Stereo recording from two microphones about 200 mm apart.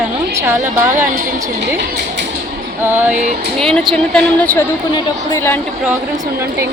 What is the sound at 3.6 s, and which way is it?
A woman's voice, centre (ahead or behind).